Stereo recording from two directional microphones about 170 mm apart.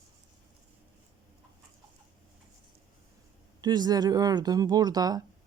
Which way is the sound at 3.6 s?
25° right (ahead or behind).